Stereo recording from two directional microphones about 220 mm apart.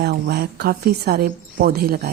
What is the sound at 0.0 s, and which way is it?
Speech, 45° right (ahead or behind).